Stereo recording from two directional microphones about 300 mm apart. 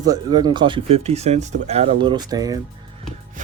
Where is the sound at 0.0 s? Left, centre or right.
Centre.